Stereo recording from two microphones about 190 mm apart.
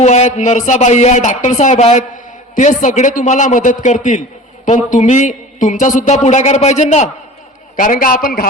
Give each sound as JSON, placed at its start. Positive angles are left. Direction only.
{"t": 0.0, "sound": "a man's voice", "side_deg": 35}